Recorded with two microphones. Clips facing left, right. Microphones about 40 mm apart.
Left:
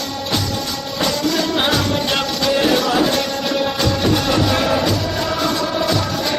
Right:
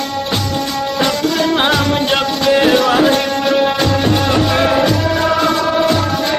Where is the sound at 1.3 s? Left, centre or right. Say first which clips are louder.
Right 4 dB; right.